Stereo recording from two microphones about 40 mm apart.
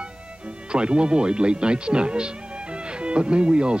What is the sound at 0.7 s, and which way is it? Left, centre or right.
Speech, right.